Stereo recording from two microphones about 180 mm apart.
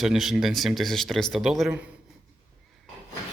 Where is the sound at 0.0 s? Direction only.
Centre (ahead or behind).